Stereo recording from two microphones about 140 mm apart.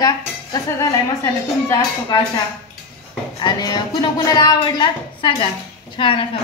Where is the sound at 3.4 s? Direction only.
30° left (ahead or behind).